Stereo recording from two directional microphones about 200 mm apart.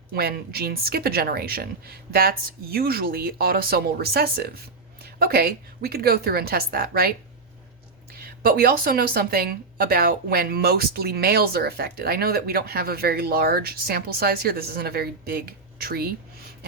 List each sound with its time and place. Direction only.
0.1 s a woman's voice: 50° right (ahead or behind)
8.2 s a woman's voice: 50° right (ahead or behind)